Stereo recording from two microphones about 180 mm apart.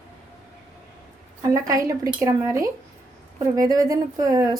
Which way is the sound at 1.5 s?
20° right (ahead or behind).